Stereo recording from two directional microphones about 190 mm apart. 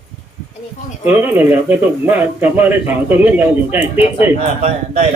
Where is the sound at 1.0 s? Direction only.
10° right (ahead or behind).